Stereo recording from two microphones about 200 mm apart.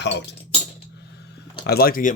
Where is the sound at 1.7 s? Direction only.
50° left (ahead or behind).